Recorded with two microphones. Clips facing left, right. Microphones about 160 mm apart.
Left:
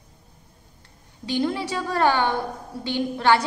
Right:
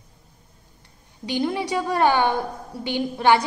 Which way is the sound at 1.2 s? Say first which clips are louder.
Even; 15° right (ahead or behind).